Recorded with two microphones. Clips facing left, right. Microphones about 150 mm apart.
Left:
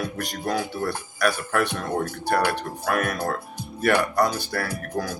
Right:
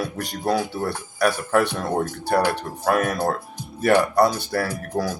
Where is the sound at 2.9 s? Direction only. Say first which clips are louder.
Right 4 dB; 35° right (ahead or behind).